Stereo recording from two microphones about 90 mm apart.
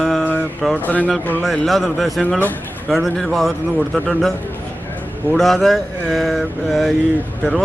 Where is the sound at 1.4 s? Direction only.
Centre (ahead or behind).